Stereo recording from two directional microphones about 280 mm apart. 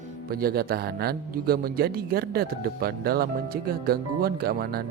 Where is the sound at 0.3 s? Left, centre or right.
Right.